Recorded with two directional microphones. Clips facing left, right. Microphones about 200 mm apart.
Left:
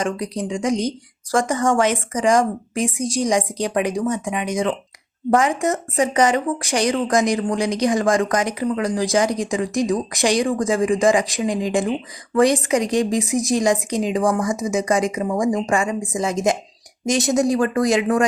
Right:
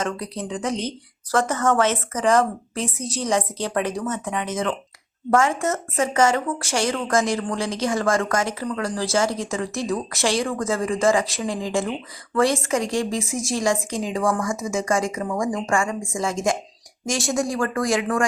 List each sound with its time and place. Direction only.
0.0 s speech: 15° left (ahead or behind)